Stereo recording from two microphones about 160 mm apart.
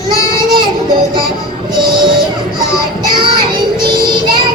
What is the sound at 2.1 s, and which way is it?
Music, 65° right (ahead or behind).